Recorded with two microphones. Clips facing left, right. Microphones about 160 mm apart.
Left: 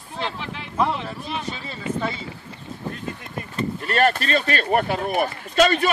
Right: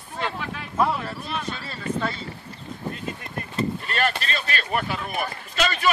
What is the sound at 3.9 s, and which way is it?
Speech, 45° left (ahead or behind).